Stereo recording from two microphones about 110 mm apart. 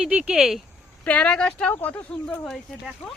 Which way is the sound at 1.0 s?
10° left (ahead or behind).